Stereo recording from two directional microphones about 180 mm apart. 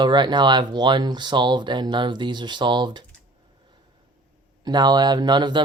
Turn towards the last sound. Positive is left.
turn(degrees=-25)  # may be behind; listen again after turning